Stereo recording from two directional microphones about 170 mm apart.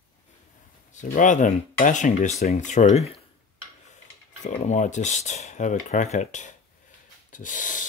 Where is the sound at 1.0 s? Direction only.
50° left (ahead or behind).